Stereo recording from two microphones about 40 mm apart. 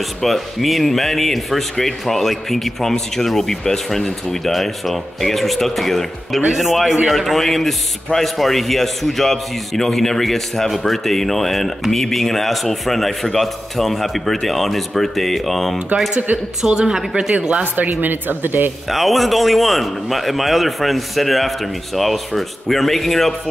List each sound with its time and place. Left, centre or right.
0.2 s a man's voice: centre
16.3 s a woman's voice: right
16.6 s a woman's voice: centre
17.4 s speech: right
17.7 s speech: right
18.9 s a man's voice: centre